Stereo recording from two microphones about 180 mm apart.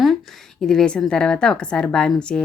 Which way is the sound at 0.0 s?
Centre (ahead or behind).